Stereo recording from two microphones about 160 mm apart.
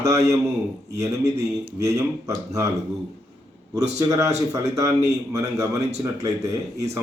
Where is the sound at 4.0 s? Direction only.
20° right (ahead or behind).